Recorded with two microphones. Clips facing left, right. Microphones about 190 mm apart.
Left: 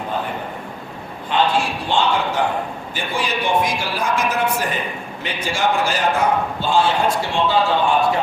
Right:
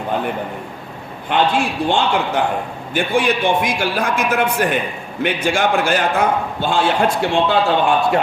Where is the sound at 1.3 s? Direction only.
55° right (ahead or behind).